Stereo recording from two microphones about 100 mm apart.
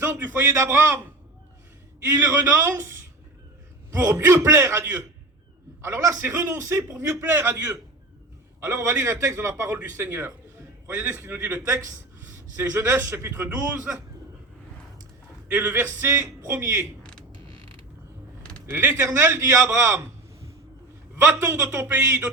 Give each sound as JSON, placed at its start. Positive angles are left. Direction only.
{"t": 0.0, "sound": "a man's voice", "side_deg": -20}
{"t": 2.1, "sound": "a man's voice", "side_deg": -20}
{"t": 4.0, "sound": "a man's voice", "side_deg": -25}
{"t": 9.0, "sound": "a man's voice", "side_deg": -30}
{"t": 13.9, "sound": "a man's voice", "side_deg": -15}
{"t": 15.4, "sound": "a man's voice", "side_deg": -20}
{"t": 17.0, "sound": "creak", "side_deg": 10}
{"t": 18.6, "sound": "a man's voice", "side_deg": -20}
{"t": 21.2, "sound": "a man's voice", "side_deg": -20}